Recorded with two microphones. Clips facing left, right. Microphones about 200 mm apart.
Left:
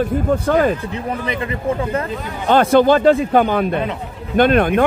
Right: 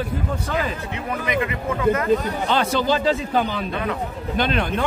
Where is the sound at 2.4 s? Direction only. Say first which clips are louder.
Left 11 dB; 55° left (ahead or behind).